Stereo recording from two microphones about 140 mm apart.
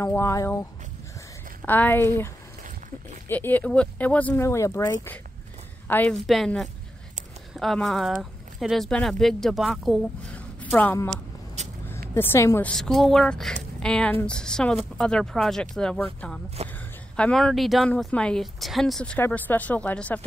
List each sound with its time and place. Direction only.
0.0 s speech: 20° left (ahead or behind)
1.7 s a woman's voice: 15° left (ahead or behind)
6.2 s speech: centre (ahead or behind)
10.3 s a sound: 10° left (ahead or behind)
11.6 s vehicle: 55° right (ahead or behind)
12.1 s speech: 20° left (ahead or behind)
12.6 s speech: 5° left (ahead or behind)
16.6 s a woman's voice: 50° right (ahead or behind)
17.2 s speech: 5° left (ahead or behind)
19.1 s speech: 15° left (ahead or behind)